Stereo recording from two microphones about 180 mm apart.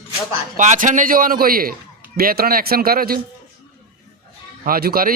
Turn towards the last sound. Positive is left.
turn(degrees=-55)  # may be behind; listen again after turning